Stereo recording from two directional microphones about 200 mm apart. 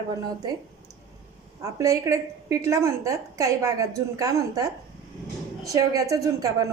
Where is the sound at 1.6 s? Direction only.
15° right (ahead or behind).